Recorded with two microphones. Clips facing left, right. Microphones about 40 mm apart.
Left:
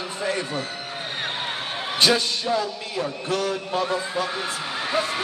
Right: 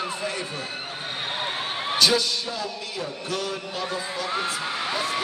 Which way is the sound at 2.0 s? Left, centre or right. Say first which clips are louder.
Left 2 dB; left.